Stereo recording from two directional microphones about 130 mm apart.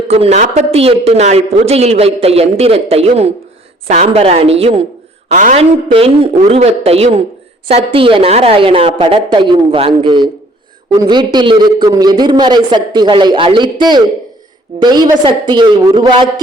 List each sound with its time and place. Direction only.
0.1 s a man's voice: 55° right (ahead or behind)
5.3 s a woman's voice: 80° right
5.5 s a man's voice: 45° right (ahead or behind)